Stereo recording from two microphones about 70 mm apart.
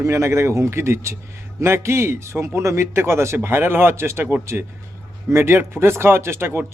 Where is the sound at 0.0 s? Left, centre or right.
Right.